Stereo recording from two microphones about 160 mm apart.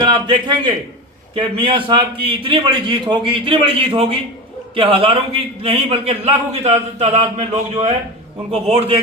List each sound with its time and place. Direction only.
0.0 s a man's voice: 30° right (ahead or behind)